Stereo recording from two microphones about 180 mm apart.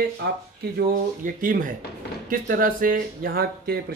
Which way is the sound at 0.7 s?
50° right (ahead or behind).